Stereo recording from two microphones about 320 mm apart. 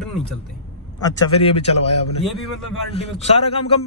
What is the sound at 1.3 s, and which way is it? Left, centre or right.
A man's voice, centre.